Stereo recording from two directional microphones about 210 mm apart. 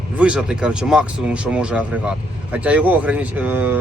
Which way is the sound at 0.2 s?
5° right (ahead or behind).